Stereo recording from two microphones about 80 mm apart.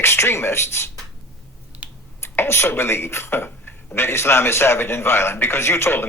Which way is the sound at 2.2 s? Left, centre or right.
Left.